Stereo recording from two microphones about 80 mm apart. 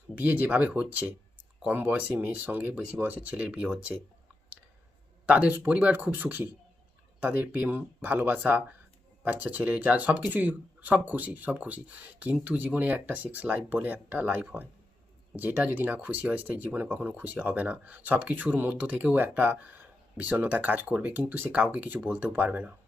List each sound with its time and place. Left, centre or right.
0.2 s speech: right
5.2 s speech: centre